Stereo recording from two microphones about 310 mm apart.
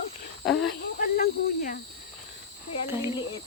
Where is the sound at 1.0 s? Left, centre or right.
Left.